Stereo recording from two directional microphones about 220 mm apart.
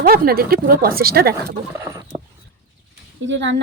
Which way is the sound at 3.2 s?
55° right (ahead or behind).